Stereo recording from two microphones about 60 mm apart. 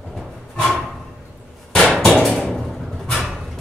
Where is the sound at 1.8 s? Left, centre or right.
Centre.